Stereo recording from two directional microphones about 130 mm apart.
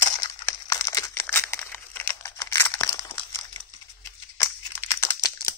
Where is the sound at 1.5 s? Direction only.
15° left (ahead or behind).